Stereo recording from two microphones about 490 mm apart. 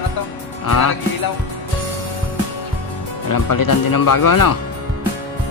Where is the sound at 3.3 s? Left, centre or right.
Left.